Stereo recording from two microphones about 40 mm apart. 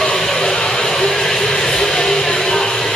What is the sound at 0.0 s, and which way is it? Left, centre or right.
Music, centre.